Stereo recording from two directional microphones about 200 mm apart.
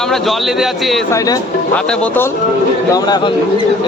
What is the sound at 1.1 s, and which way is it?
Speech, 20° left (ahead or behind).